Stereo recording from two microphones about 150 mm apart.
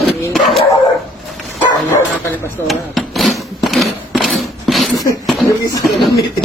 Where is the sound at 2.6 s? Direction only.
Centre (ahead or behind).